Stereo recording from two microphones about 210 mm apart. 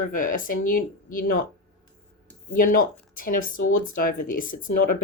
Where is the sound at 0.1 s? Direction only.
40° left (ahead or behind).